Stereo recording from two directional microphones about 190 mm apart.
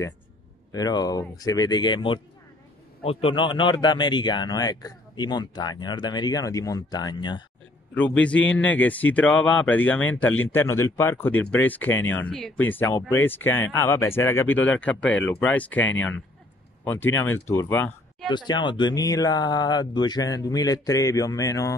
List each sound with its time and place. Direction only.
0.7 s speech: 20° left (ahead or behind)
7.9 s speech: 5° left (ahead or behind)
18.3 s speech: 25° left (ahead or behind)